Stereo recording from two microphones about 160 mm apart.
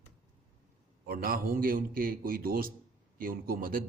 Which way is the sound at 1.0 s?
65° right (ahead or behind).